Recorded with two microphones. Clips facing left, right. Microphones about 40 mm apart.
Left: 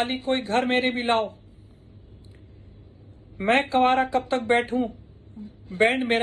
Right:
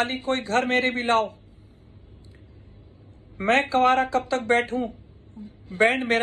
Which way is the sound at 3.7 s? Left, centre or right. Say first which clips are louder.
Even; left.